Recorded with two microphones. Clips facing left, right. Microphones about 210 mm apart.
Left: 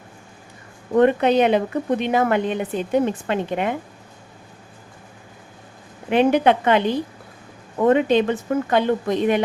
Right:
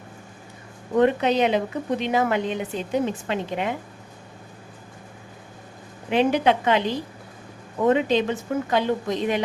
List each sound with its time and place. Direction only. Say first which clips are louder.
0.9 s a woman's voice: left 4 dB; 55° left (ahead or behind)
6.1 s a woman's voice: left 3 dB; 55° left (ahead or behind)